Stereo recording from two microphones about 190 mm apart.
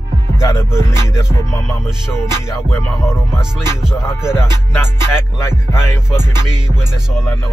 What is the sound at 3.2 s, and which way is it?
Music, 5° right (ahead or behind).